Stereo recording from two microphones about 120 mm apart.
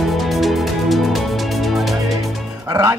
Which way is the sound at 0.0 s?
Centre (ahead or behind).